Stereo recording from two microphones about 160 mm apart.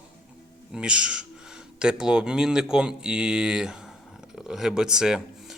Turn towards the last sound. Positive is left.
turn(degrees=-5)  # may be behind; listen again after turning